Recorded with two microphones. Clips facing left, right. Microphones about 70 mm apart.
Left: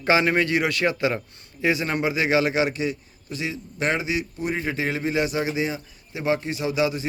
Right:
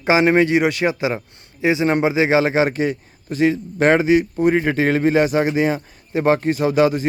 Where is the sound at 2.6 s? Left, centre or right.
Right.